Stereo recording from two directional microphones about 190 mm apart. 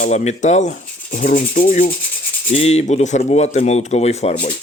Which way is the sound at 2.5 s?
35° left (ahead or behind).